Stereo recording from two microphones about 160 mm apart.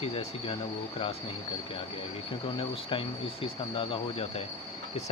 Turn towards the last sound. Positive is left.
turn(degrees=35)  # may be behind; listen again after turning